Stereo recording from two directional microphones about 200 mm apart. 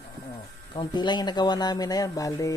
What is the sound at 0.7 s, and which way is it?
Speech, 20° left (ahead or behind).